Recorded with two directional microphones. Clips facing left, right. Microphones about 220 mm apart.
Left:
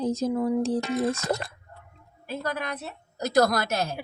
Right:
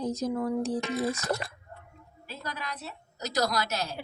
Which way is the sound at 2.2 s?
55° left (ahead or behind).